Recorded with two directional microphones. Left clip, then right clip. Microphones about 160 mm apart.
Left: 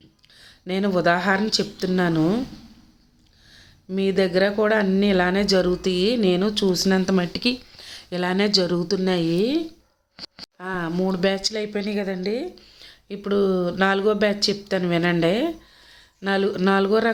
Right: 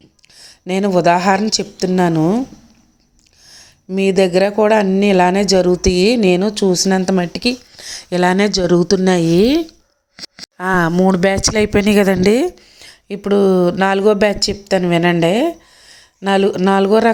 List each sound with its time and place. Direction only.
0.3 s speech: 40° right (ahead or behind)
3.5 s speech: 45° right (ahead or behind); by 7.8 s 25° right (ahead or behind)
7.8 s a woman's voice: 40° right (ahead or behind)
10.2 s a sound: 20° right (ahead or behind)
10.6 s a woman's voice: 60° right (ahead or behind)
10.9 s a woman's voice: 45° right (ahead or behind); by 12.5 s 80° right
12.5 s speech: 45° right (ahead or behind)